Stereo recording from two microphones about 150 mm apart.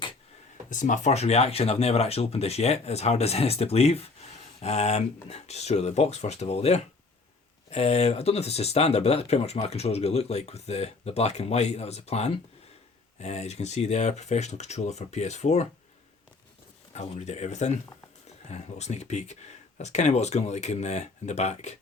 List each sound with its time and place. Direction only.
0.7 s speech: 60° left (ahead or behind)
16.9 s speech: 45° left (ahead or behind)